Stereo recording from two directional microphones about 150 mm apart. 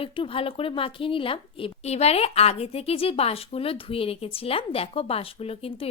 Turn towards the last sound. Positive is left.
turn(degrees=40)  # may be behind; listen again after turning